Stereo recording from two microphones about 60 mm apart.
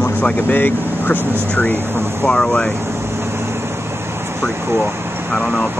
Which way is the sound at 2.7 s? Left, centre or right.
Right.